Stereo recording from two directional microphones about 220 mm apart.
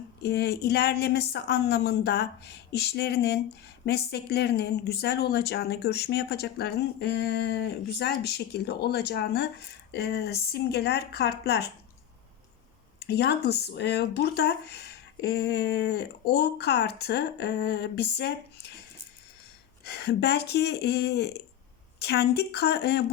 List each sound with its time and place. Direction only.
0.2 s speech: 45° left (ahead or behind)
13.0 s speech: 50° left (ahead or behind)
19.8 s speech: 50° left (ahead or behind)